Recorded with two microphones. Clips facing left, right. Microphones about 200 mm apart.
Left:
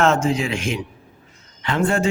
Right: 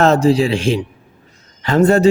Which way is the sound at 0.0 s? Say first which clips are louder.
Right 6 dB; 35° right (ahead or behind).